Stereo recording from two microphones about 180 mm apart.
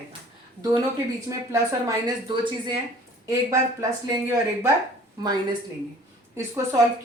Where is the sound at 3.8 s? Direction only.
20° right (ahead or behind).